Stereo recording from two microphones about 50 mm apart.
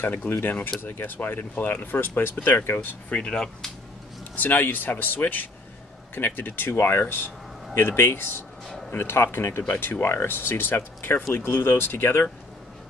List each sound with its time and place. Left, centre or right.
0.0 s speech: left
3.1 s speech: left
4.4 s speech: left